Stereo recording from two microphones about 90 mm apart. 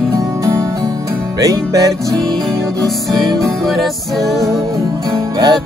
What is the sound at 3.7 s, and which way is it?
Music, centre (ahead or behind).